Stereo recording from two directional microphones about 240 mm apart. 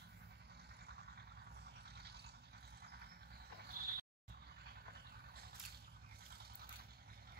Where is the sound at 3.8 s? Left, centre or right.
Right.